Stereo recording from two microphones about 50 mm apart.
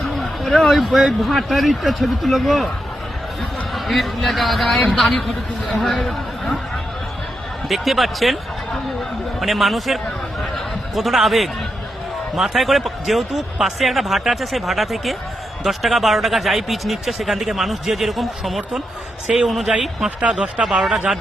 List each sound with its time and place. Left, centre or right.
0.2 s speech: centre
3.8 s a man's voice: centre
7.7 s speech: centre
9.4 s speech: centre
10.4 s a sound: centre
12.4 s speech: centre
20.1 s speech: right
20.8 s speech: centre